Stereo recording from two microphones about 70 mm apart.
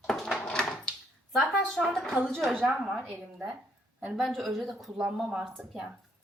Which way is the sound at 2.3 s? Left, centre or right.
Centre.